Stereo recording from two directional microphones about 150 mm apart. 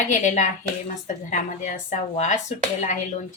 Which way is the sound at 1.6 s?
55° left (ahead or behind).